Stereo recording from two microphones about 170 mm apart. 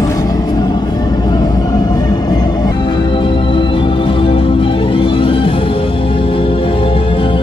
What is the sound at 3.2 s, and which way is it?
Music, 30° left (ahead or behind).